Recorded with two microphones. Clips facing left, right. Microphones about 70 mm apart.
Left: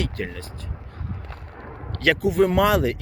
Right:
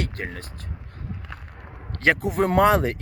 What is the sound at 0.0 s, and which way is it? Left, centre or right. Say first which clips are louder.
Speech: left 2 dB; right.